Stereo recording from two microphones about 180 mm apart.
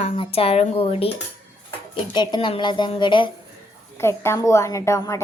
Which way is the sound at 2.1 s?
25° left (ahead or behind).